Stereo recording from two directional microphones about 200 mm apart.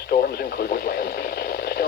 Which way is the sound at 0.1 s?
50° left (ahead or behind).